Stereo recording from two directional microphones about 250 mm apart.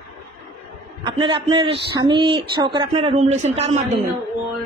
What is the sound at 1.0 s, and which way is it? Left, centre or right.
Speech, centre.